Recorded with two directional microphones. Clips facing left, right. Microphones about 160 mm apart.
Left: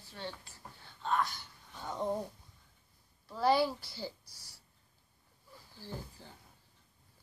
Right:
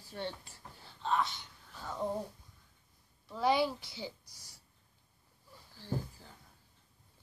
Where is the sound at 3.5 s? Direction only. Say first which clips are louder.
Left 1 dB; 20° right (ahead or behind).